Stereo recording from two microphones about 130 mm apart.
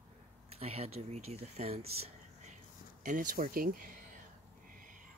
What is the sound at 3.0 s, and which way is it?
Speech, 85° right.